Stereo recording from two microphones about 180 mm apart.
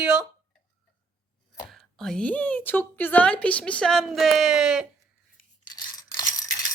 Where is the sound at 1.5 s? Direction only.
Centre (ahead or behind).